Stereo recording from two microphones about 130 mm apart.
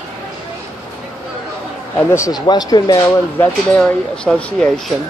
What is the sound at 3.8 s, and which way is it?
Speech, 10° left (ahead or behind).